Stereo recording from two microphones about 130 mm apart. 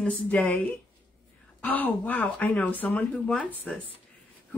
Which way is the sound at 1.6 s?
10° left (ahead or behind).